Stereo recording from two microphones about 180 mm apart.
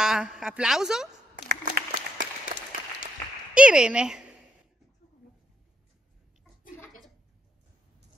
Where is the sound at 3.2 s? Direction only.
15° left (ahead or behind).